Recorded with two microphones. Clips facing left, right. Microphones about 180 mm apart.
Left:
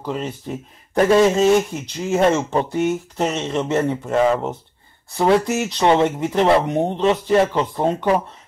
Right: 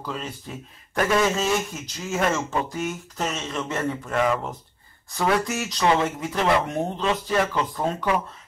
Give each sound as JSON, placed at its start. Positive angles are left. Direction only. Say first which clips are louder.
{"t": 0.0, "sound": "speech", "louder": "left 7 dB", "side_deg": 25}